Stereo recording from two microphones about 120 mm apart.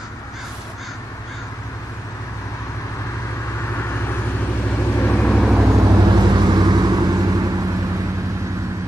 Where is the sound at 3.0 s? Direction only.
25° left (ahead or behind).